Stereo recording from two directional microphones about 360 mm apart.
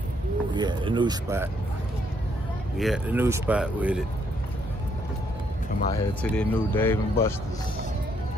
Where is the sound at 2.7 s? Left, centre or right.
Centre.